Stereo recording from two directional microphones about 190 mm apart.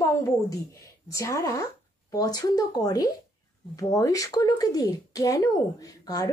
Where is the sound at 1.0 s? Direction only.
15° left (ahead or behind).